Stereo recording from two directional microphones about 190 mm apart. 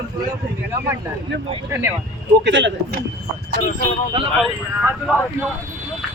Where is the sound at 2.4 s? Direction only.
70° right (ahead or behind).